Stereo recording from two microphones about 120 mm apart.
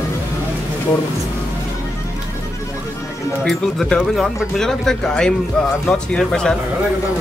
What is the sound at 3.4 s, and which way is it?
Speech, 5° left (ahead or behind).